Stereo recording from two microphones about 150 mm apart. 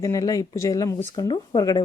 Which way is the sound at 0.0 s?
20° left (ahead or behind).